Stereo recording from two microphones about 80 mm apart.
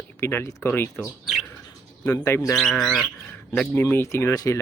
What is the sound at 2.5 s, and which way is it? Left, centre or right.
Speech, centre.